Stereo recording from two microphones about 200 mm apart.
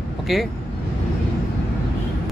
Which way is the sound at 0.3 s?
Centre (ahead or behind).